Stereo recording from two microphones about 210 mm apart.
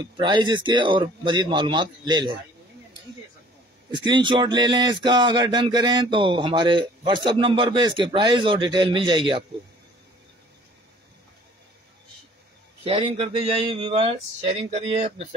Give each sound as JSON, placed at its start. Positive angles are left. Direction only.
{"t": 0.0, "sound": "speech", "side_deg": -20}
{"t": 3.9, "sound": "speech", "side_deg": -20}
{"t": 12.8, "sound": "speech", "side_deg": -25}